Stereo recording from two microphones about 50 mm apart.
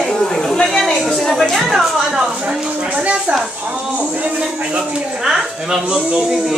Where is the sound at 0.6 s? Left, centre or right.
Centre.